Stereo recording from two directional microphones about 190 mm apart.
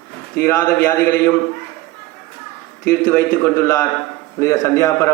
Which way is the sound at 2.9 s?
10° left (ahead or behind).